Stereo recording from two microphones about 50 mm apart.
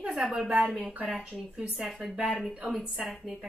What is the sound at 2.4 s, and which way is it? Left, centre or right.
Speech, centre.